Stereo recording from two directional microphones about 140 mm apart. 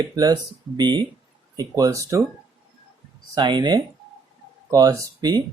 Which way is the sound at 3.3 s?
30° right (ahead or behind).